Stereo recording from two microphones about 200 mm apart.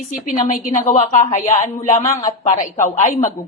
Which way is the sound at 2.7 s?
40° left (ahead or behind).